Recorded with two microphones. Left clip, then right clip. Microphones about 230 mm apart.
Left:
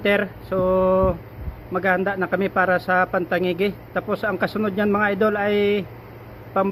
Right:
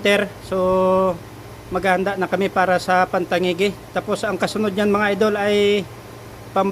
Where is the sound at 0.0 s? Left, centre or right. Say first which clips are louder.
Right 3 dB; centre.